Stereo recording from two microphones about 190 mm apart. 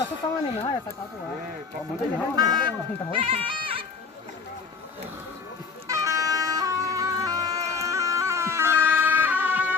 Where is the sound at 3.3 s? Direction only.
25° right (ahead or behind).